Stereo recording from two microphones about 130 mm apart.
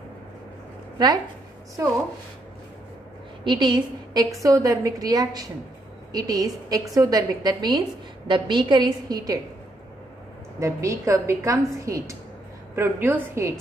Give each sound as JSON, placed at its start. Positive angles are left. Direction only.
{"t": 0.9, "sound": "speech", "side_deg": -30}
{"t": 3.4, "sound": "a woman's voice", "side_deg": -35}
{"t": 10.6, "sound": "a woman's voice", "side_deg": -20}